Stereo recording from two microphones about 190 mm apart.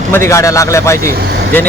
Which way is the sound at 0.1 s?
15° left (ahead or behind).